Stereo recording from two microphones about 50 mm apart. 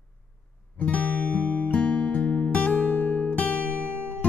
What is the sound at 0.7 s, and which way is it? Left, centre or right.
Music, left.